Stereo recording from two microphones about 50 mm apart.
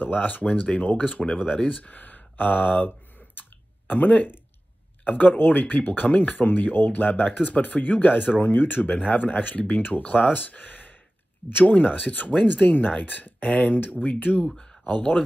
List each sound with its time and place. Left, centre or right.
0.0 s speech: left
3.3 s clicking: left
5.0 s speech: left
14.5 s speech: centre